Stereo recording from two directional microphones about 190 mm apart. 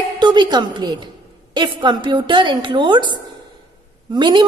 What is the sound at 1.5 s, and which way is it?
A woman's voice, 25° right (ahead or behind).